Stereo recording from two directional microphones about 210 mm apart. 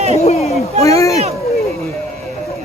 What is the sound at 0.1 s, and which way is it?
Speech, 30° left (ahead or behind).